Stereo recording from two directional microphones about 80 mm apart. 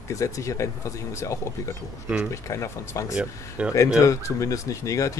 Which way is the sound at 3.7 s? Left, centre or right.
Left.